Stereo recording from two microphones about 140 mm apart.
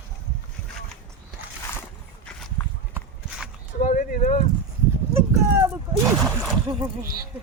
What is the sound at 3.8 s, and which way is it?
Speech, 65° left (ahead or behind).